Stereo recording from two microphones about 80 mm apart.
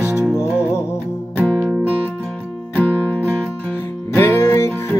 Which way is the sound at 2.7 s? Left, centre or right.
Left.